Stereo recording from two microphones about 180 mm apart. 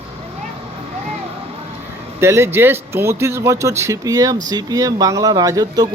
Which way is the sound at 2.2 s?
15° right (ahead or behind).